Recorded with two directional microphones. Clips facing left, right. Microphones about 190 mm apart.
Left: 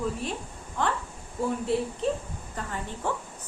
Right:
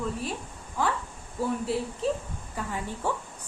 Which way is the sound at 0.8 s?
10° right (ahead or behind).